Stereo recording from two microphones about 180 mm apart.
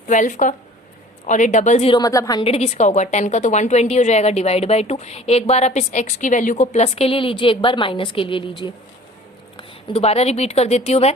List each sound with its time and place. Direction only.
0.1 s a woman's voice: 45° left (ahead or behind)
2.0 s a woman's voice: 20° left (ahead or behind)
2.4 s a woman's voice: 35° left (ahead or behind)